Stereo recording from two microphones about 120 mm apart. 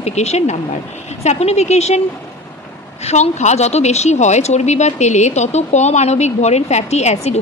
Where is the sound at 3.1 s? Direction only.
70° left (ahead or behind).